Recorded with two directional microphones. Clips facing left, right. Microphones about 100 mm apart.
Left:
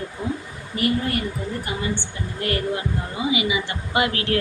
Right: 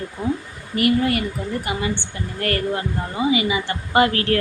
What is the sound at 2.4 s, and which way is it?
Speech, 45° right (ahead or behind).